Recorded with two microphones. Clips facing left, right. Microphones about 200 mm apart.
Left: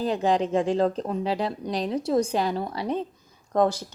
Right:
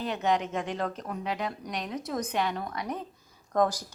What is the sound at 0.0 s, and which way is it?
Speech, 30° left (ahead or behind).